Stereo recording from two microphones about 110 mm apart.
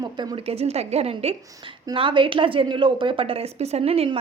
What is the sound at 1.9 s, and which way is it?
Speech, 50° right (ahead or behind).